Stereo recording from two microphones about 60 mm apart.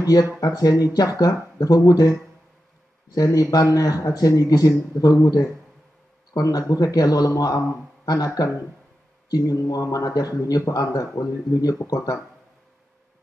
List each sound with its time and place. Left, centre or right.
0.0 s speech: left
3.3 s speech: left
6.3 s speech: left